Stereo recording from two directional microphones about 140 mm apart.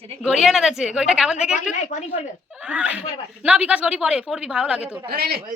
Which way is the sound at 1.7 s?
60° left (ahead or behind).